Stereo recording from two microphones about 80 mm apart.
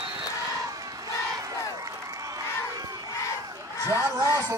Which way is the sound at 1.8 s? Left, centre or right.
Right.